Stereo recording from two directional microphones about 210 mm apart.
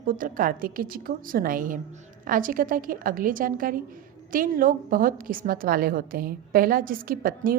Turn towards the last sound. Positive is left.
turn(degrees=-45)  # may be behind; listen again after turning